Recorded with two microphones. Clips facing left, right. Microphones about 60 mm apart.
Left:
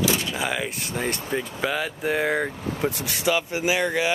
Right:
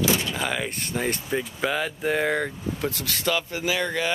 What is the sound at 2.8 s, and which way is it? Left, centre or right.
Speech, left.